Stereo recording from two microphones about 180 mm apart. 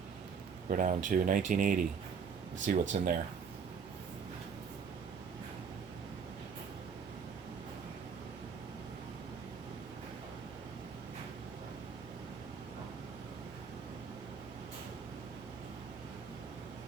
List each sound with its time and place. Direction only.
0.7 s speech: 45° right (ahead or behind)